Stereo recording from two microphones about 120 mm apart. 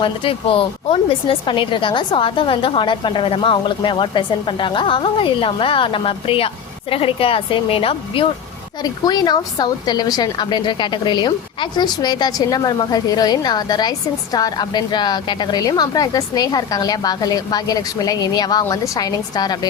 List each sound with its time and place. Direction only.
0.0 s speech: 50° left (ahead or behind)
8.8 s a woman's voice: 35° left (ahead or behind)